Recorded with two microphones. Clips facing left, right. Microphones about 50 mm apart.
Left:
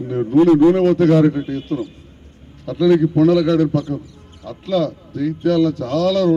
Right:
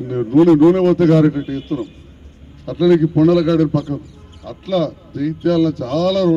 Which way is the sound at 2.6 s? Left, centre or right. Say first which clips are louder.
Right 1 dB; centre.